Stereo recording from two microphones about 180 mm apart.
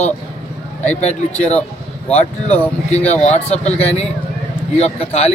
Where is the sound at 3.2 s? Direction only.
35° left (ahead or behind).